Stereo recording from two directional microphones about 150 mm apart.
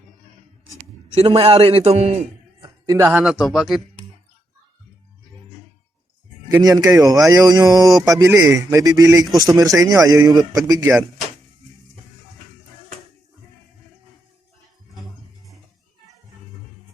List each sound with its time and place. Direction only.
1.1 s a man's voice: 45° right (ahead or behind)
2.8 s speech: 25° right (ahead or behind)
3.1 s speech: 5° right (ahead or behind)
6.6 s speech: 25° right (ahead or behind)